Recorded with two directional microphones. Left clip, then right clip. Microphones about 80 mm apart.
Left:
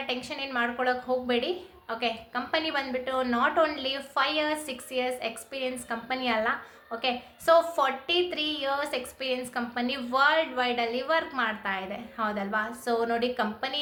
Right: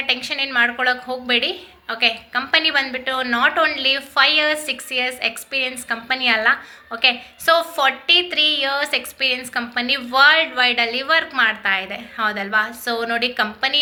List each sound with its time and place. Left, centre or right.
0.1 s a woman's voice: left